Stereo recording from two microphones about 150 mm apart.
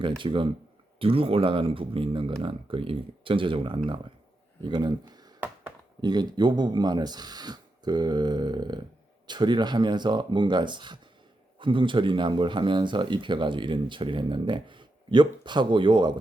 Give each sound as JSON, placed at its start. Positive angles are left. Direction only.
{"t": 0.2, "sound": "speech", "side_deg": -35}